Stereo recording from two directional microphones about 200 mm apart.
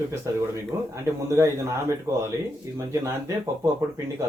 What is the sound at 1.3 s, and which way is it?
Speech, 15° right (ahead or behind).